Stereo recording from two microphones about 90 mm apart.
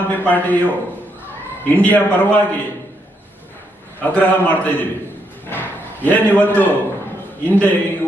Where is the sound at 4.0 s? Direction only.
20° left (ahead or behind).